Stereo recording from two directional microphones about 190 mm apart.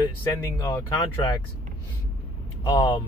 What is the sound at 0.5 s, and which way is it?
Speech, 15° left (ahead or behind).